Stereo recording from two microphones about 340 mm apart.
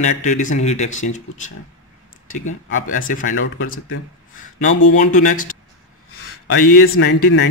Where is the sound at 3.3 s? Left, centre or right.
Left.